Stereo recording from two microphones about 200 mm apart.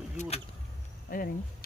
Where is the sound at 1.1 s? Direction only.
45° left (ahead or behind).